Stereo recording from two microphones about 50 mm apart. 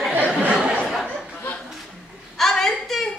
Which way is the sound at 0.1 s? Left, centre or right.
Right.